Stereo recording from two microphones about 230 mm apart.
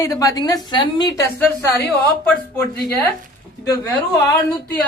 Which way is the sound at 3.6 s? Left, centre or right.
Centre.